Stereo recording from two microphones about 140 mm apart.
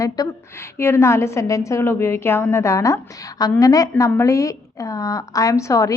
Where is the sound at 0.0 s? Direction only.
20° left (ahead or behind).